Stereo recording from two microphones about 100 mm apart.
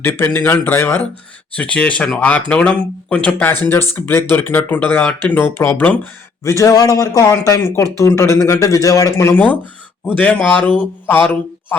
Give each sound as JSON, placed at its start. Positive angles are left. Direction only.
{"t": 0.0, "sound": "a man's voice", "side_deg": 20}
{"t": 10.1, "sound": "a man's voice", "side_deg": 15}